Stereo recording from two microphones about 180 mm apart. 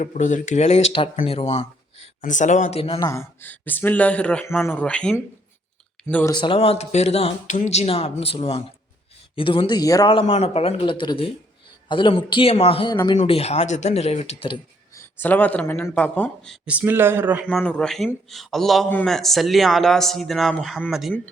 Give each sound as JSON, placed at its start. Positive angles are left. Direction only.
{"t": 0.0, "sound": "speech", "side_deg": 45}
{"t": 3.0, "sound": "speech", "side_deg": 15}
{"t": 6.3, "sound": "a man's voice", "side_deg": 25}
{"t": 14.9, "sound": "speech", "side_deg": 10}
{"t": 16.6, "sound": "speech", "side_deg": -10}
{"t": 17.4, "sound": "a man's voice", "side_deg": 5}